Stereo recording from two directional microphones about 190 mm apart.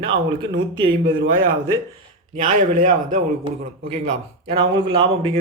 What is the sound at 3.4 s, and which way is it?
A man's voice, 30° right (ahead or behind).